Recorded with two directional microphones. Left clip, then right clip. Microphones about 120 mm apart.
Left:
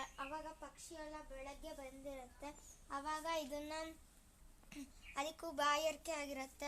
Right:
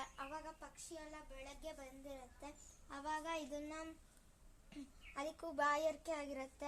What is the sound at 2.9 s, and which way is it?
Child singing, 20° left (ahead or behind).